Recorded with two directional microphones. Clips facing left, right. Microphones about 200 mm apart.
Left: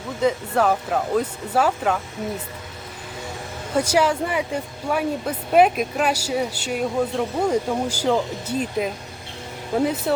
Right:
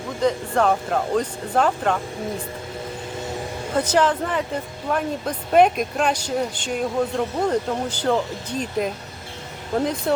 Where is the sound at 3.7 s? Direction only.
10° left (ahead or behind).